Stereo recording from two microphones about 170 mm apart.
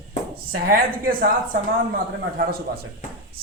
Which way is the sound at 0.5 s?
55° right (ahead or behind).